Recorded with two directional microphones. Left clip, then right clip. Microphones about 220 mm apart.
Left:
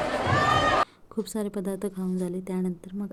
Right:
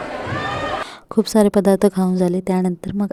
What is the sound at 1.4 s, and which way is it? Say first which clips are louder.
A woman's voice: right 19 dB; 50° right (ahead or behind).